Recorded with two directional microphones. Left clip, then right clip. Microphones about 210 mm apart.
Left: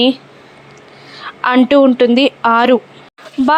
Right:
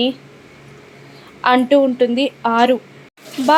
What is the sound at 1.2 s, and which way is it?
A woman's voice, 20° left (ahead or behind).